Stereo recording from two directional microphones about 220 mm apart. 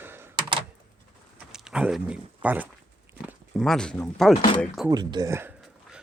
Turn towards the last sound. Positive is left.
turn(degrees=-15)  # may be behind; listen again after turning